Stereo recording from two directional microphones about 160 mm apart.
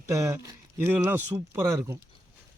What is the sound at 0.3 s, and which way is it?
Speech, 15° right (ahead or behind).